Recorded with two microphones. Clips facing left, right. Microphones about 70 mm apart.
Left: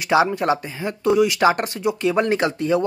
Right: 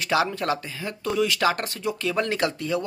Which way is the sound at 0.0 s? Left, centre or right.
Centre.